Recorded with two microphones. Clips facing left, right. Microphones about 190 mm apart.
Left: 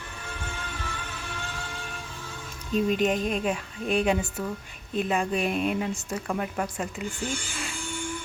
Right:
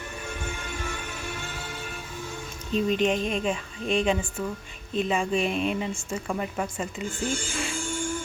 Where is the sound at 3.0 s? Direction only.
5° left (ahead or behind).